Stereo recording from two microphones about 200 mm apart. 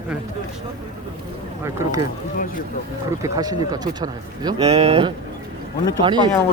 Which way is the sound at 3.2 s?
20° right (ahead or behind).